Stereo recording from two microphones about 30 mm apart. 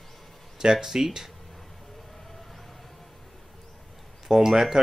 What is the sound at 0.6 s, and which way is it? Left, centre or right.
Speech, centre.